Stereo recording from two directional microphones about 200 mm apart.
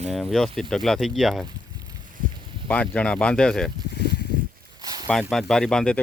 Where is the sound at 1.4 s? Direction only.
20° right (ahead or behind).